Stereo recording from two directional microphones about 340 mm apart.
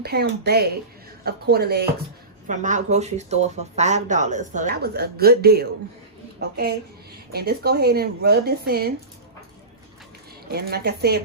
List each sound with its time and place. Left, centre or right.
0.0 s speech: right
7.3 s speech: right
10.5 s speech: right